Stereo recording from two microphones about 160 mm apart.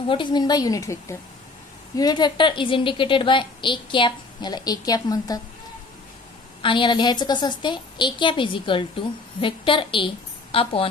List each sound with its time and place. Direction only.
0.1 s a woman's voice: 30° left (ahead or behind)
6.6 s a woman's voice: 30° left (ahead or behind)